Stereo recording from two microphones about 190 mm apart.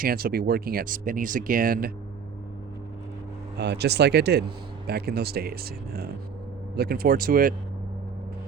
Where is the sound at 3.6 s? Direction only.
60° right (ahead or behind).